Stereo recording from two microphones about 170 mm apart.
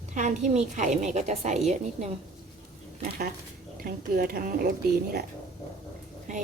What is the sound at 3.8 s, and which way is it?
Speech, 60° right (ahead or behind).